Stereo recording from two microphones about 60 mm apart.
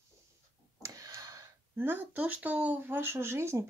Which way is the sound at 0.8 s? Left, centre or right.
Right.